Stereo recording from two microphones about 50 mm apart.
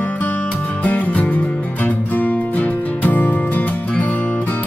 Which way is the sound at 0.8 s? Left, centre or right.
Left.